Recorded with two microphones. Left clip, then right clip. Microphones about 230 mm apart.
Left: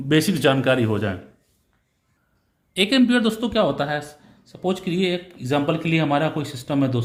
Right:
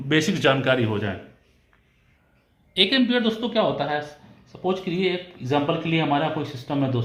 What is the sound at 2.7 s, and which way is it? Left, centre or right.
Speech, left.